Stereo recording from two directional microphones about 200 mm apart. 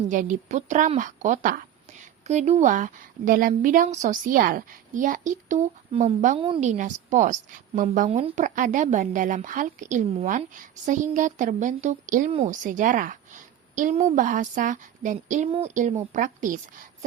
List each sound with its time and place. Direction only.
0.1 s speech: 40° right (ahead or behind)
12.6 s speech: 40° right (ahead or behind)